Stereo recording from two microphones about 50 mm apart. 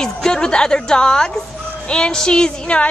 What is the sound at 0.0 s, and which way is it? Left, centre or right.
A woman's voice, centre.